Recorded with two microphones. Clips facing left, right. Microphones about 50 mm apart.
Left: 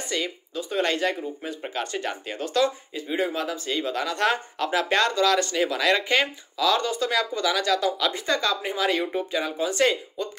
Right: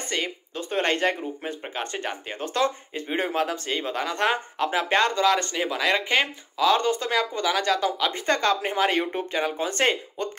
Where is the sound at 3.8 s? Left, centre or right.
Right.